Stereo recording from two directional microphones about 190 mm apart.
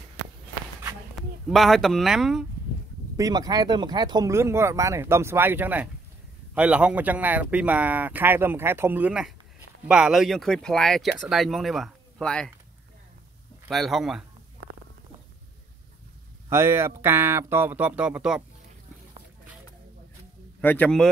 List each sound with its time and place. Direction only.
1.1 s speech: centre (ahead or behind)
3.2 s speech: 20° right (ahead or behind); by 12.4 s 5° left (ahead or behind)
13.7 s speech: centre (ahead or behind)
16.4 s speech: 15° right (ahead or behind)
20.6 s a man's voice: 10° left (ahead or behind)